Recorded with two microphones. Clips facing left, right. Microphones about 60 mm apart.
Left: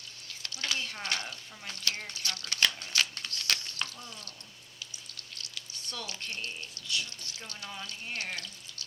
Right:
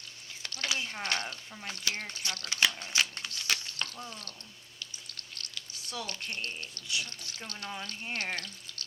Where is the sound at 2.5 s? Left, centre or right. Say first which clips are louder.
Right 1 dB; centre.